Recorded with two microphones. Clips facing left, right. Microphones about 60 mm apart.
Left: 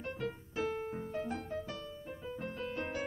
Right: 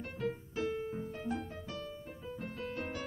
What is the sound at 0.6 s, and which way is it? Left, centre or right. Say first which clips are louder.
Music: left 2 dB; left.